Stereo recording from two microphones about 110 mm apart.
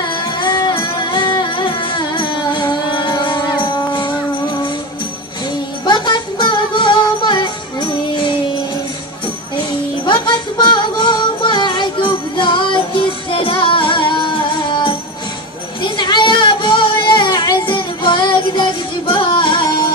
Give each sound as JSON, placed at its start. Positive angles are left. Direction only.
{"t": 0.1, "sound": "music", "side_deg": 45}
{"t": 5.9, "sound": "music", "side_deg": 45}
{"t": 10.0, "sound": "music", "side_deg": 45}
{"t": 15.8, "sound": "a sound", "side_deg": 45}